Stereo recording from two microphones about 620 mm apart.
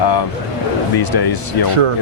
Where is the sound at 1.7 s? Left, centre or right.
Right.